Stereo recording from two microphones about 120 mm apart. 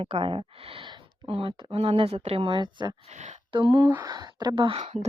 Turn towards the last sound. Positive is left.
turn(degrees=-55)  # may be behind; listen again after turning